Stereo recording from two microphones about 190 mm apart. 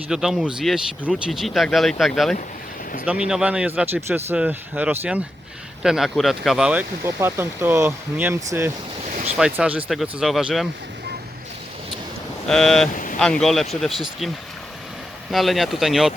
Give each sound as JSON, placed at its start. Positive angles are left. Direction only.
{"t": 0.1, "sound": "speech", "side_deg": -5}
{"t": 12.5, "sound": "speech", "side_deg": 0}
{"t": 12.9, "sound": "speech", "side_deg": 45}
{"t": 13.1, "sound": "speech", "side_deg": 5}
{"t": 15.3, "sound": "speech", "side_deg": 0}